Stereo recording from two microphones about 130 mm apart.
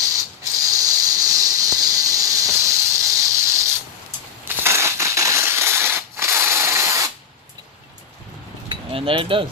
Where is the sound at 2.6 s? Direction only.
25° right (ahead or behind).